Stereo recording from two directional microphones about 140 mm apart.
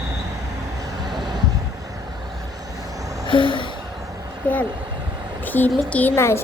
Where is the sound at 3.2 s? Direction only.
35° left (ahead or behind).